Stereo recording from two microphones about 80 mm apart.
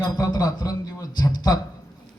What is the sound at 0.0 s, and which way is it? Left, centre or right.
Speech, left.